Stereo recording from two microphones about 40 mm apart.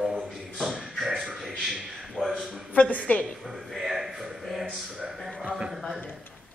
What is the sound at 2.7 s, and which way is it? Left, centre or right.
Speech, left.